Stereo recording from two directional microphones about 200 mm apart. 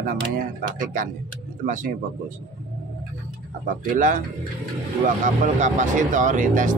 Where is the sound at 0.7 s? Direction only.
40° right (ahead or behind).